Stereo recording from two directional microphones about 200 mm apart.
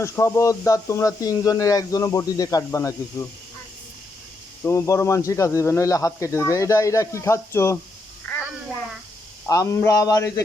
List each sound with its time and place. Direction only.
0.0 s speech: 15° left (ahead or behind)
4.6 s speech: 15° left (ahead or behind)
8.3 s a sound: 5° left (ahead or behind)
9.5 s speech: 15° left (ahead or behind)